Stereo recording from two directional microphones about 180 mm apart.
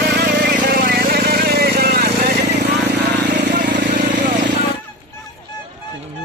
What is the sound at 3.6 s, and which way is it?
Vehicle, 45° right (ahead or behind).